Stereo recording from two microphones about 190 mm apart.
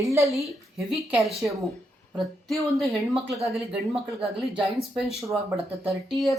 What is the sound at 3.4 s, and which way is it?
Speech, 30° right (ahead or behind).